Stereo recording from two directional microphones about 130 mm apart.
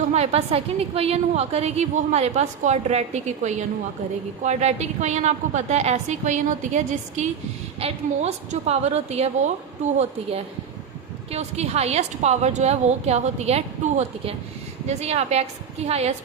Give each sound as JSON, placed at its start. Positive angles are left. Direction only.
{"t": 0.1, "sound": "a woman's voice", "side_deg": -55}
{"t": 7.8, "sound": "a woman's voice", "side_deg": -55}